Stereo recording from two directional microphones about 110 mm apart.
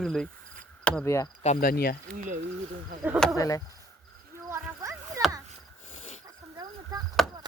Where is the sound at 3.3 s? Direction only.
30° left (ahead or behind).